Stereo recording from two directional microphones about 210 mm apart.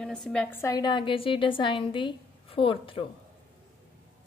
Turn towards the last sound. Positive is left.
turn(degrees=25)  # may be behind; listen again after turning